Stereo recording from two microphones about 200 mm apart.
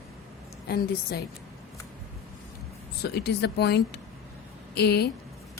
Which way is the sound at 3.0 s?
55° left (ahead or behind).